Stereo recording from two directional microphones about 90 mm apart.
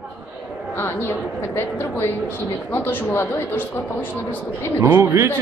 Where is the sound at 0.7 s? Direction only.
25° left (ahead or behind).